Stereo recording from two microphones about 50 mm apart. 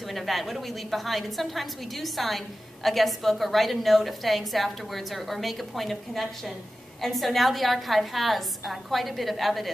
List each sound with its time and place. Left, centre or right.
0.1 s a woman's voice: centre